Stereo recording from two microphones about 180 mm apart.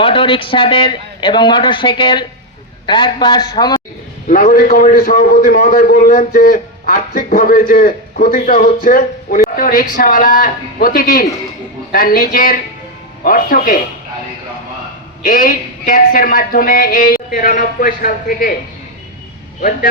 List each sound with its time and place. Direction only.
0.0 s a man's voice: 30° left (ahead or behind)
4.3 s a man's voice: 55° left (ahead or behind)
15.2 s a man's voice: 50° left (ahead or behind)